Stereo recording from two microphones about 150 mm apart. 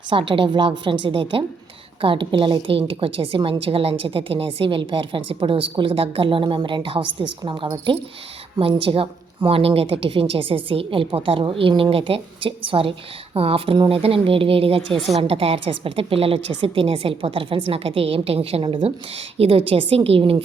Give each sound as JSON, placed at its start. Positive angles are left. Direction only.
{"t": 0.1, "sound": "a woman's voice", "side_deg": -35}